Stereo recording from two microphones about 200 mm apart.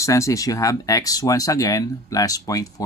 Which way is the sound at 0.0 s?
15° left (ahead or behind).